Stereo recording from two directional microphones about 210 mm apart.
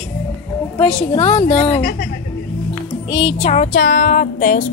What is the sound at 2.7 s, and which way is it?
Music, 20° left (ahead or behind).